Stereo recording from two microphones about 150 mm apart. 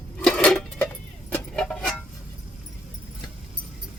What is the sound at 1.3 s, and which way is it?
Vehicle, 5° left (ahead or behind).